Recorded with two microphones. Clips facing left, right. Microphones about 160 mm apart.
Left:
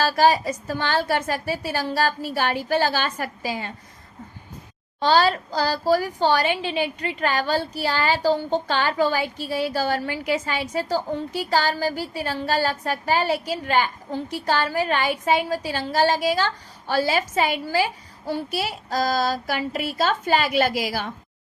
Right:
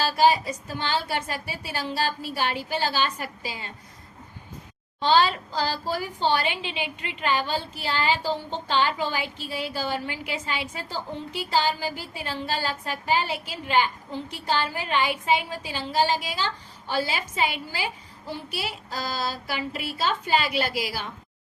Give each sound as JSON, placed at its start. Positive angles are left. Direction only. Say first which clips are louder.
{"t": 0.0, "sound": "a woman's voice", "louder": "left 2 dB", "side_deg": 45}
{"t": 4.9, "sound": "a woman's voice", "louder": "left 2 dB", "side_deg": 40}